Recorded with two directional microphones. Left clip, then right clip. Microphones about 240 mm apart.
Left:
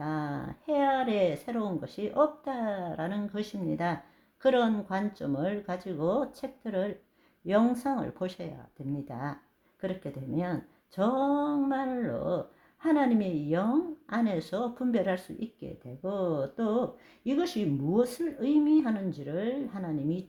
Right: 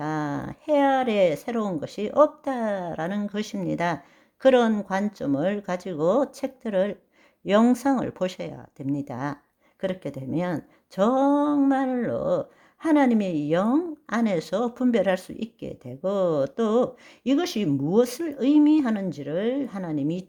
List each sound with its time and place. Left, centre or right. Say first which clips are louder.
0.0 s a woman's voice: right 6 dB; right